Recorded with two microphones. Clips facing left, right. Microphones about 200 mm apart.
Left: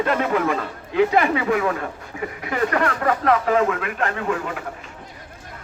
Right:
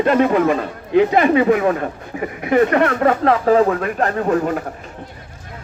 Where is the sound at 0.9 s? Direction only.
20° right (ahead or behind).